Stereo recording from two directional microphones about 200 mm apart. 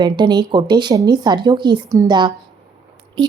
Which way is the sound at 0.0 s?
20° right (ahead or behind).